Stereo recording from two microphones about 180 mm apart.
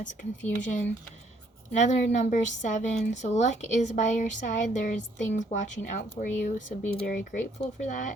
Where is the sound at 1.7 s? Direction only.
40° left (ahead or behind).